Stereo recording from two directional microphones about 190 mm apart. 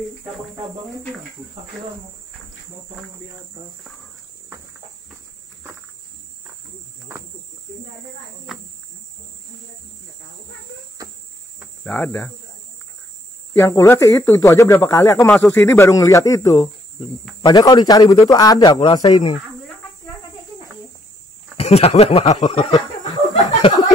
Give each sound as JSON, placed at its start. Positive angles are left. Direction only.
{"t": 8.5, "sound": "speech", "side_deg": 0}
{"t": 11.6, "sound": "speech", "side_deg": 10}
{"t": 13.5, "sound": "speech", "side_deg": 15}
{"t": 15.2, "sound": "speech", "side_deg": 0}
{"t": 15.5, "sound": "speech", "side_deg": 15}
{"t": 21.5, "sound": "a sound", "side_deg": 30}